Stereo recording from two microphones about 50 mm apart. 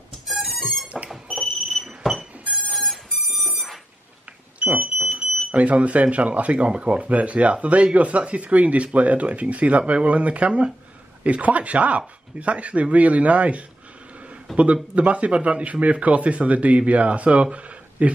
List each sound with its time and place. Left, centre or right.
0.3 s music: centre
1.0 s a sound: centre
1.4 s smoke detector: centre
2.7 s alarm clock: centre
4.6 s smoke detector: right
5.5 s speech: right